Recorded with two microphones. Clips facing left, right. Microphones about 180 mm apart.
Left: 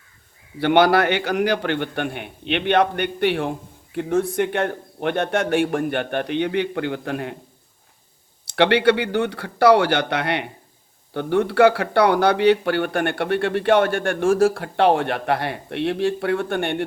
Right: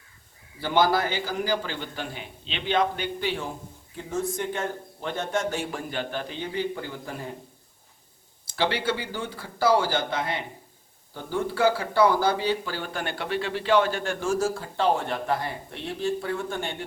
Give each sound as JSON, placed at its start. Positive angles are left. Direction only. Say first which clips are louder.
{"t": 0.6, "sound": "a man's voice", "louder": "left 7 dB", "side_deg": 70}
{"t": 8.4, "sound": "speech", "louder": "left 10 dB", "side_deg": 70}